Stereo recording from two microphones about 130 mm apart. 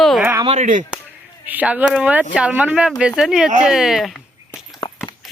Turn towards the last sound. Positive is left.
turn(degrees=30)  # may be behind; listen again after turning